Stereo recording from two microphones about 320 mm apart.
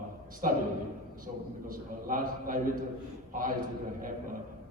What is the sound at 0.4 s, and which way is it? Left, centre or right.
Speech, right.